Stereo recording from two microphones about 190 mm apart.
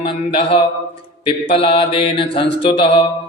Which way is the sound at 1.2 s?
30° left (ahead or behind).